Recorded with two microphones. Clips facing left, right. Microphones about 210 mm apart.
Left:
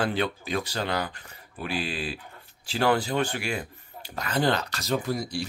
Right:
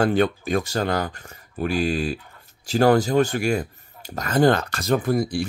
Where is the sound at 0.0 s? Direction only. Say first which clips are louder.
Right 7 dB; 45° right (ahead or behind).